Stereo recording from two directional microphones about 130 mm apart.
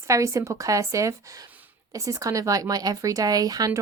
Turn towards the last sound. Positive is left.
turn(degrees=-30)  # may be behind; listen again after turning